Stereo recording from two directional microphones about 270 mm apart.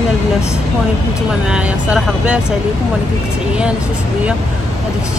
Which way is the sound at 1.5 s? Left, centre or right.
Centre.